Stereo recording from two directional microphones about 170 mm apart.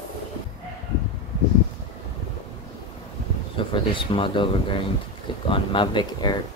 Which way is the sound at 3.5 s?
30° left (ahead or behind).